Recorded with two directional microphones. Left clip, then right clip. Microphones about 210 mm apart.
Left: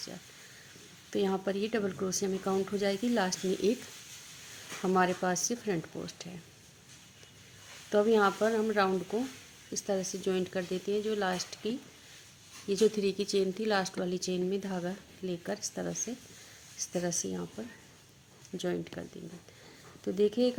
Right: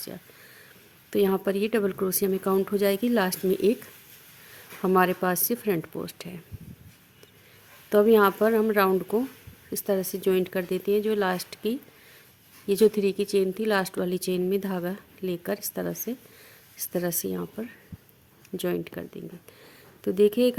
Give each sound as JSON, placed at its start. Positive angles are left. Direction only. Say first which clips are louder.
{"t": 1.1, "sound": "speech", "louder": "right 7 dB", "side_deg": -45}
{"t": 4.8, "sound": "speech", "louder": "right 6 dB", "side_deg": -40}
{"t": 7.9, "sound": "a woman's voice", "louder": "right 7 dB", "side_deg": -45}
{"t": 20.1, "sound": "speech", "louder": "right 7 dB", "side_deg": -45}